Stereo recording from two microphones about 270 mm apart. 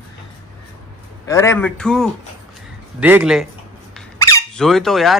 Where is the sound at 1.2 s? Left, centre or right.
Centre.